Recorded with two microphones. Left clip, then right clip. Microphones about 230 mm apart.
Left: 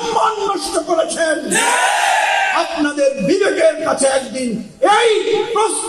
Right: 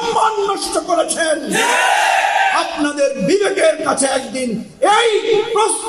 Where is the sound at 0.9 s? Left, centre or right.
Right.